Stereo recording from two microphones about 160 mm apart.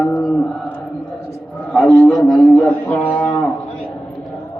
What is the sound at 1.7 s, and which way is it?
Speech, 5° left (ahead or behind).